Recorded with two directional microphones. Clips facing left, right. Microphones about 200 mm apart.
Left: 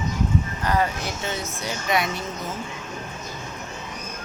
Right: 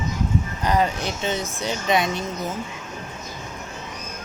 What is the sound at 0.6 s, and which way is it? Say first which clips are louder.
Speech: right 4 dB; 20° right (ahead or behind).